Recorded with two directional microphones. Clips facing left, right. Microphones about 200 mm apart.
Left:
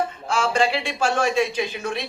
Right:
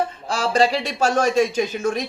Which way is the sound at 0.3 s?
35° right (ahead or behind).